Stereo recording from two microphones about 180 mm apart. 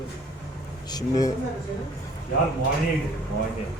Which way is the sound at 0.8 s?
20° left (ahead or behind).